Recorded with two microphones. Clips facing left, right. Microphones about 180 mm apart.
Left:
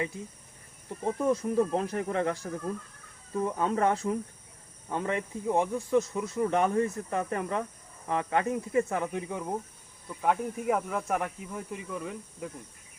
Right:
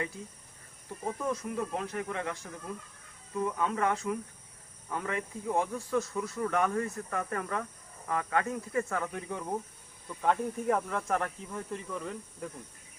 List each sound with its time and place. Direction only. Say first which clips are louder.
1.0 s speech: left 6 dB; 30° left (ahead or behind); by 12.5 s 5° left (ahead or behind)